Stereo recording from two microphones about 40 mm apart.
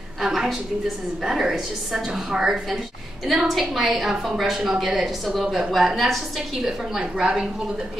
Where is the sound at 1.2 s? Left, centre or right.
Centre.